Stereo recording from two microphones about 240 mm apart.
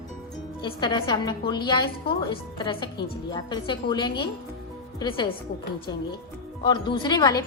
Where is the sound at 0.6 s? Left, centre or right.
Centre.